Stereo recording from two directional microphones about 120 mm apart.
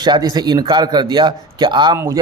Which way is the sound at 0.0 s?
35° right (ahead or behind).